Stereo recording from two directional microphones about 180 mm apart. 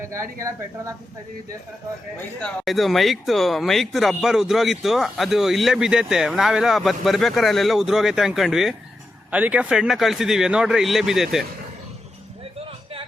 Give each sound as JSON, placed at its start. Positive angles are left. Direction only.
{"t": 0.0, "sound": "speech", "side_deg": -15}
{"t": 2.4, "sound": "speech", "side_deg": 0}